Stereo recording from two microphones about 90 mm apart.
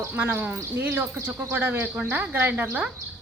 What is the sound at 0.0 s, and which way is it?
Speech, 25° right (ahead or behind).